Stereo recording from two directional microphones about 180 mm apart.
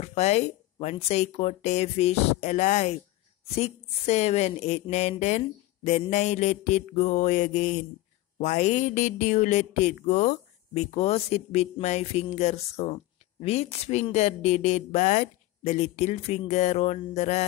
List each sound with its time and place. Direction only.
0.0 s speech: 35° left (ahead or behind)